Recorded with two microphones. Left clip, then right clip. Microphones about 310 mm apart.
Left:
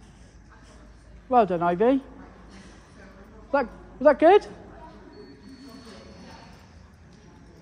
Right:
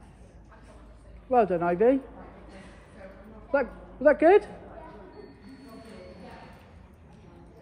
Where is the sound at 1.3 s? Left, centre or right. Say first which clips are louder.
Left 2 dB; left.